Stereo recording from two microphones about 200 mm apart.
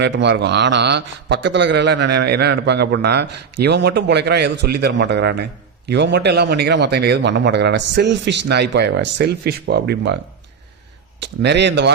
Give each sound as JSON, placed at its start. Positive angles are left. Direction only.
{"t": 0.0, "sound": "a man's voice", "side_deg": -60}
{"t": 11.2, "sound": "a man's voice", "side_deg": -60}